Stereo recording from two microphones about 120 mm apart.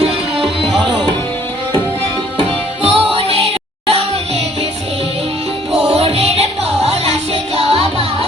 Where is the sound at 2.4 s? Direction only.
50° right (ahead or behind).